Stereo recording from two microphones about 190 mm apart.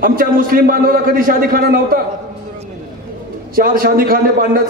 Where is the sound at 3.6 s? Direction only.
50° right (ahead or behind).